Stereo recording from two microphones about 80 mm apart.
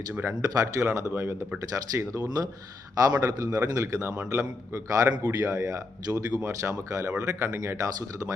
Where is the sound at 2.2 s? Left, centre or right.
Right.